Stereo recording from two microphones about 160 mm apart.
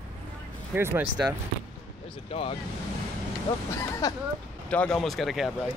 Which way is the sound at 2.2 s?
35° left (ahead or behind).